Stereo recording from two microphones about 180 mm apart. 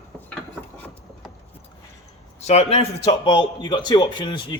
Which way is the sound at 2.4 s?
35° left (ahead or behind).